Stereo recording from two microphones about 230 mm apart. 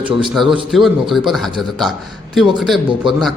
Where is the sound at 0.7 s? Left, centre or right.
Centre.